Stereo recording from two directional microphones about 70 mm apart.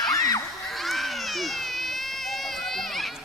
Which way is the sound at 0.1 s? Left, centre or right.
Left.